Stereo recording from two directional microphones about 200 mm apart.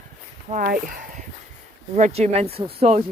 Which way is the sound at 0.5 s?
40° right (ahead or behind).